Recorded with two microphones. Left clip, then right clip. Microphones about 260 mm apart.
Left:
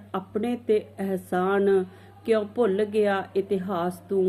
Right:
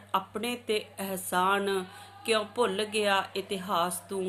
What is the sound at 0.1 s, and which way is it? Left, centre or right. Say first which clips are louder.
Speech: left 1 dB; centre.